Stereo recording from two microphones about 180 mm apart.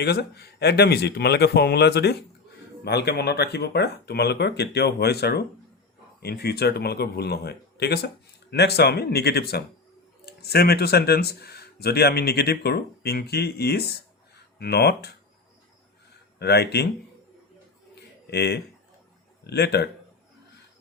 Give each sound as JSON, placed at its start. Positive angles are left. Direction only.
{"t": 0.0, "sound": "speech", "side_deg": 65}
{"t": 16.4, "sound": "speech", "side_deg": 65}
{"t": 18.3, "sound": "speech", "side_deg": 65}